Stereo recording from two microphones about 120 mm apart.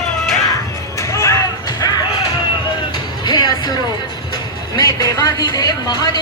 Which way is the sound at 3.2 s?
35° left (ahead or behind).